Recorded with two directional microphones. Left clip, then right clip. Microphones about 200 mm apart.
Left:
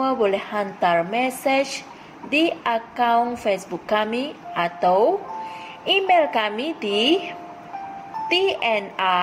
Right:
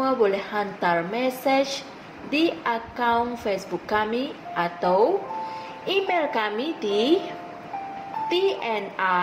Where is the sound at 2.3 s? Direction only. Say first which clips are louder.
Left 3 dB; 35° left (ahead or behind).